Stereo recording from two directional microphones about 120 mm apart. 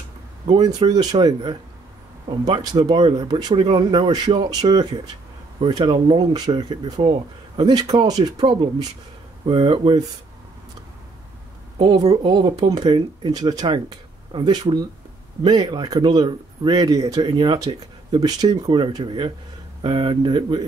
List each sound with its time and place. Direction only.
0.5 s speech: 40° right (ahead or behind)
11.8 s speech: 35° right (ahead or behind)